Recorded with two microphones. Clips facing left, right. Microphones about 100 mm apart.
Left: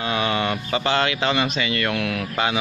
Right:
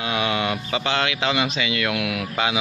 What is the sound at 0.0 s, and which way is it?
Speech, 5° right (ahead or behind).